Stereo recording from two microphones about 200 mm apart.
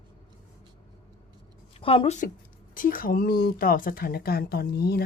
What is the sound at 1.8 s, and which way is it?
A woman's voice, 30° left (ahead or behind).